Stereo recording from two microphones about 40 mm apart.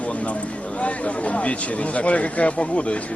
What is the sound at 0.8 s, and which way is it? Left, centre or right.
Speech, left.